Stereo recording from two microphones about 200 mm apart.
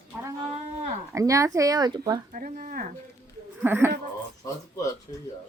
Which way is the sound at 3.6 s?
10° right (ahead or behind).